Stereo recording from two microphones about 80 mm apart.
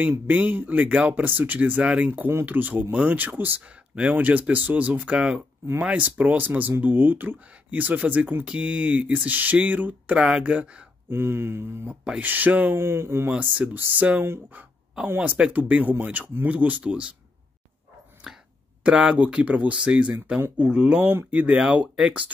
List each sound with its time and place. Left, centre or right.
0.3 s speech: right
11.1 s a sound: right
11.9 s speech: centre; by 13.3 s right
13.3 s speech: centre
14.2 s a sound: right
15.0 s speech: right
18.9 s speech: centre
21.0 s speech: right